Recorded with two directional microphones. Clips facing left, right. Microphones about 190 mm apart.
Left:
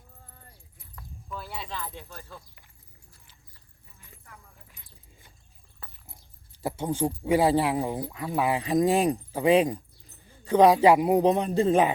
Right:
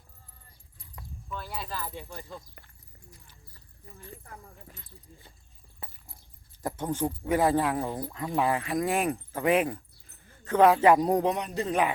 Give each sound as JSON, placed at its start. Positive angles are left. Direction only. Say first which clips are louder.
{"t": 1.3, "sound": "speech", "louder": "even", "side_deg": 0}
{"t": 4.2, "sound": "speech", "louder": "right 5 dB", "side_deg": -45}
{"t": 5.8, "sound": "a sound", "louder": "right 2 dB", "side_deg": -20}
{"t": 6.6, "sound": "speech", "louder": "left 2 dB", "side_deg": 10}
{"t": 11.2, "sound": "speech", "louder": "left 6 dB", "side_deg": 25}